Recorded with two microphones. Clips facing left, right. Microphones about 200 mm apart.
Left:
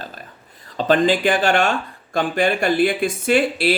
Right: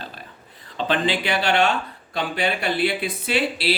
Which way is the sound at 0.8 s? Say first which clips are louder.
Left 6 dB; 45° left (ahead or behind).